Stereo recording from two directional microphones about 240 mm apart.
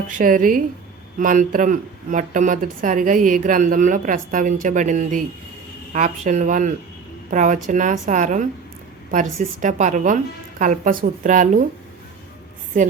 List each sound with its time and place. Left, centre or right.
0.1 s speech: right